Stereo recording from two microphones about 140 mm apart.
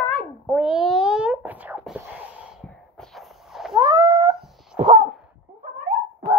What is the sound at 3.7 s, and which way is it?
Cat, 35° right (ahead or behind).